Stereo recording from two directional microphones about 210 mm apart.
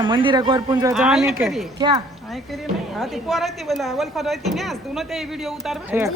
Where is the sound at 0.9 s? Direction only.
Centre (ahead or behind).